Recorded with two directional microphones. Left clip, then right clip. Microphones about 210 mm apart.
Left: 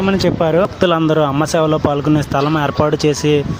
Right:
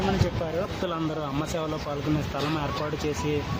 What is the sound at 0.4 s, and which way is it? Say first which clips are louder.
Speech: left 16 dB; 45° left (ahead or behind).